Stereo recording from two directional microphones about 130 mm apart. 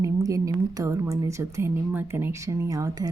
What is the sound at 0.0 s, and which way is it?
A woman's voice, 25° right (ahead or behind).